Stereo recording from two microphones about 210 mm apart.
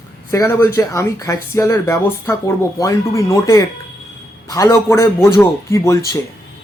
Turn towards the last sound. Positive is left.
turn(degrees=15)  # may be behind; listen again after turning